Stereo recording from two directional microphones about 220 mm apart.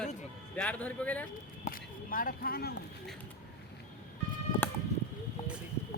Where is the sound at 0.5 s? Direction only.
5° left (ahead or behind).